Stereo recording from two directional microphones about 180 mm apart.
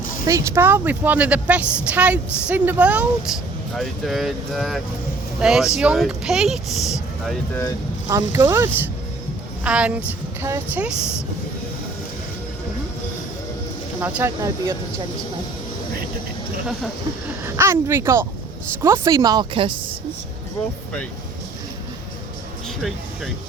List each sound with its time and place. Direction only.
0.3 s a woman's voice: 15° right (ahead or behind); by 7.3 s centre (ahead or behind)
8.0 s a woman's voice: 15° right (ahead or behind)
14.0 s a woman's voice: 10° right (ahead or behind)
17.4 s a woman's voice: 15° right (ahead or behind)